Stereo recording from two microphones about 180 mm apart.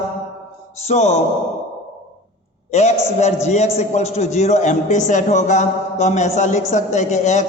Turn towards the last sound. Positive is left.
turn(degrees=40)  # may be behind; listen again after turning